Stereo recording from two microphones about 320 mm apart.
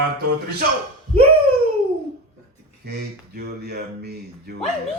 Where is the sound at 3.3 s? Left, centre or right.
Right.